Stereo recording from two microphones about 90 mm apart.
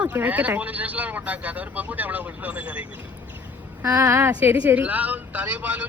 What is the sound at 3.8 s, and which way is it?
Speech, 35° right (ahead or behind).